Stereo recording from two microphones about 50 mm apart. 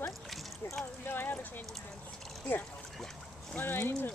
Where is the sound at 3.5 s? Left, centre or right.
Left.